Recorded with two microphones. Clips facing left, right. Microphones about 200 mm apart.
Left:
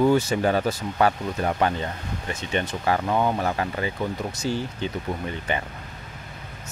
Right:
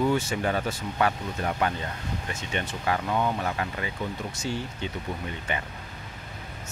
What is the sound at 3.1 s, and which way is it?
Speech, 50° left (ahead or behind).